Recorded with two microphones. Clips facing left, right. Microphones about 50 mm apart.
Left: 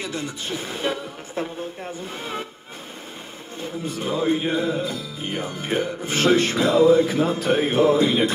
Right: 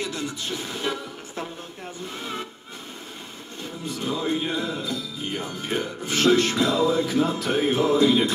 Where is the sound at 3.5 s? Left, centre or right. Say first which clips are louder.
Left 3 dB; centre.